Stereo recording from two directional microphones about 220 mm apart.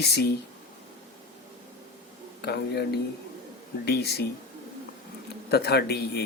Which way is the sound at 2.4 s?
50° left (ahead or behind).